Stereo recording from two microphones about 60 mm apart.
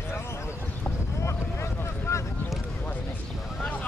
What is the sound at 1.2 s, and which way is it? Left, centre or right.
Vehicle, left.